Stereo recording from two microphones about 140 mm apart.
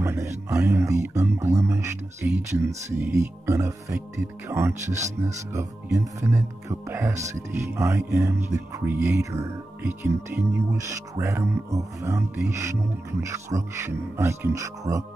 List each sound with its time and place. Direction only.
0.0 s speech: 20° right (ahead or behind)